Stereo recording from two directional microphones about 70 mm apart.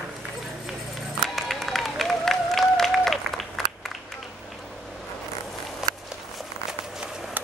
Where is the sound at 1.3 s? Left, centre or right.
Centre.